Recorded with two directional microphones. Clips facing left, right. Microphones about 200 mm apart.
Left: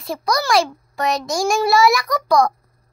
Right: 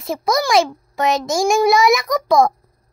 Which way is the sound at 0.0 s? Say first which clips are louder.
Right 3 dB; 20° right (ahead or behind).